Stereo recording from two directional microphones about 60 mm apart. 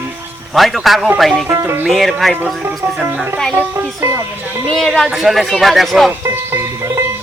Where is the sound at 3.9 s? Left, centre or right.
Right.